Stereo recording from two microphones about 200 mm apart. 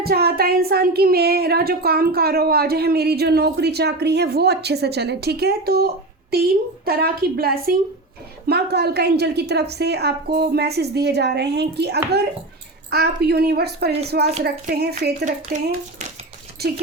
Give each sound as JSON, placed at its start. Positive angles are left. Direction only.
{"t": 0.0, "sound": "a woman's voice", "side_deg": -50}
{"t": 15.2, "sound": "speech", "side_deg": -35}
{"t": 16.6, "sound": "speech", "side_deg": -50}